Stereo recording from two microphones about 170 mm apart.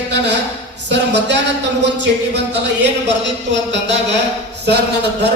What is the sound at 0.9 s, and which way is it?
Speech, 90° right.